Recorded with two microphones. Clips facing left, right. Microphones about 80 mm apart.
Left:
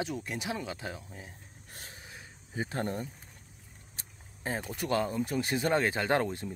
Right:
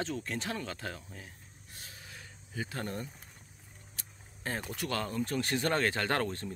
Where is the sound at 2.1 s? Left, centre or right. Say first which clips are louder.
Left 3 dB; left.